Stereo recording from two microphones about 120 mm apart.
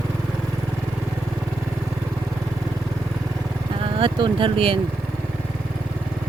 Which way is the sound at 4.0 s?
40° right (ahead or behind).